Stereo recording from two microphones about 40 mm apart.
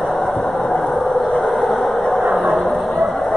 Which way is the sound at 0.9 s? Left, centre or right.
Centre.